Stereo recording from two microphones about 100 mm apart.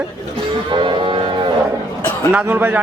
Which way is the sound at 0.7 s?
55° right (ahead or behind).